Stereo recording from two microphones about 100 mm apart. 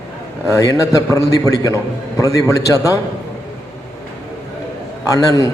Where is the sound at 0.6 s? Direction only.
35° left (ahead or behind).